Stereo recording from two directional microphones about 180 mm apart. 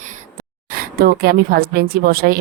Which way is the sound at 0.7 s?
60° right (ahead or behind).